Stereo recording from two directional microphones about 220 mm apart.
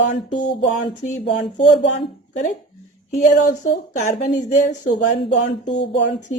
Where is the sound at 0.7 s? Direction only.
35° left (ahead or behind).